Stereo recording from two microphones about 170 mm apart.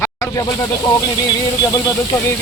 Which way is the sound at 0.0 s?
15° left (ahead or behind).